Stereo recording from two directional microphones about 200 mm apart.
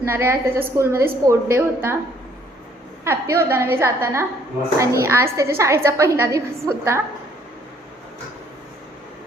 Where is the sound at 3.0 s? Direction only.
15° right (ahead or behind).